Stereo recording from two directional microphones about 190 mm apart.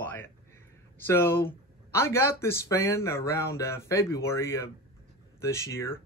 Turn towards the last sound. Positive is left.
turn(degrees=15)  # may be behind; listen again after turning